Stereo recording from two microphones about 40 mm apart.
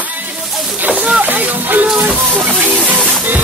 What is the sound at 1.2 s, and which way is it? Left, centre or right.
Speech, right.